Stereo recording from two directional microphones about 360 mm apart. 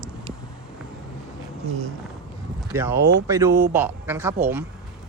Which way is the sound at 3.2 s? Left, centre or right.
Centre.